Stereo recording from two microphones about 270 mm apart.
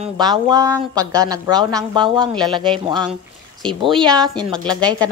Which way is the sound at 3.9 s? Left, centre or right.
Centre.